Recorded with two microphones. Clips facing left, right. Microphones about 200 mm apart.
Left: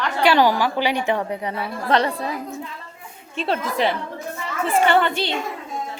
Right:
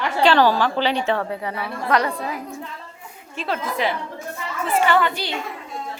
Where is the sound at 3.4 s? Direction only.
30° left (ahead or behind).